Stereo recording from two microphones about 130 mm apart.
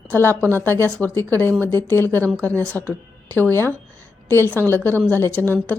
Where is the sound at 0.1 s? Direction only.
15° left (ahead or behind).